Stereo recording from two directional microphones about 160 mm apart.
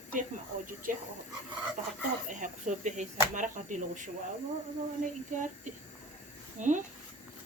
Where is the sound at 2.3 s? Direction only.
50° right (ahead or behind).